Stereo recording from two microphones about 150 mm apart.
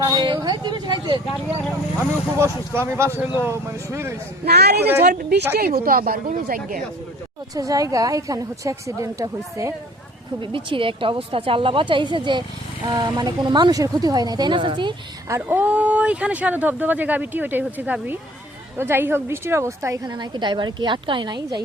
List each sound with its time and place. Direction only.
0.0 s a woman's voice: 30° right (ahead or behind)
2.4 s speech: 15° right (ahead or behind)
4.4 s speech: 90° right
4.8 s speech: 15° right (ahead or behind)
5.0 s speech: 90° right; by 6.8 s 65° right (ahead or behind)
7.5 s a woman's voice: 25° right (ahead or behind)
10.4 s speech: 35° right (ahead or behind)
15.4 s a woman's voice: 10° right (ahead or behind); by 21.6 s 30° right (ahead or behind)